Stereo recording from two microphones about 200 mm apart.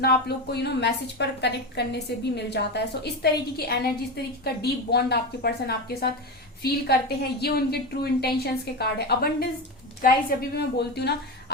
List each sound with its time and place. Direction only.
0.0 s a woman's voice: 55° left (ahead or behind)
4.4 s a woman's voice: 55° left (ahead or behind)